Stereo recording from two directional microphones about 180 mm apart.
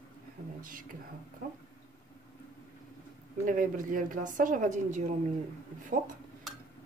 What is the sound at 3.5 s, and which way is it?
A woman's voice, 50° right (ahead or behind).